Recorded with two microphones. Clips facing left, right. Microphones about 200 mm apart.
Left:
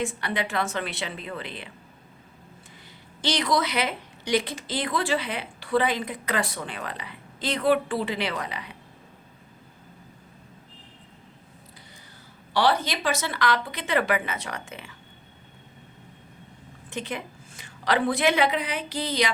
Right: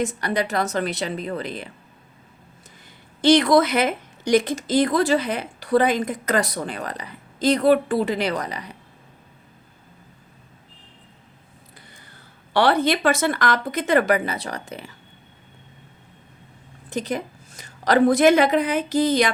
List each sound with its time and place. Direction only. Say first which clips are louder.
0.0 s a woman's voice: right 5 dB; 40° right (ahead or behind)
3.2 s a woman's voice: right 10 dB; 55° right (ahead or behind)
12.5 s a woman's voice: right 5 dB; 55° right (ahead or behind); by 14.9 s 40° right (ahead or behind)
16.9 s a woman's voice: right 7 dB; 40° right (ahead or behind)